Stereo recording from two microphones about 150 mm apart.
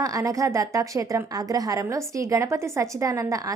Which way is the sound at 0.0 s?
20° right (ahead or behind).